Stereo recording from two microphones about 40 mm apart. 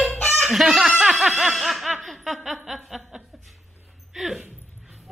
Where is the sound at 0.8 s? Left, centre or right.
Centre.